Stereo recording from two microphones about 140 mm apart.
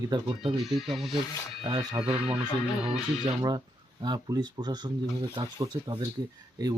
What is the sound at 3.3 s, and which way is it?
Speech, 30° right (ahead or behind).